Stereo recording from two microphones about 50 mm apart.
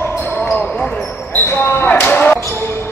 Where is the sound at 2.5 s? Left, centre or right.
Left.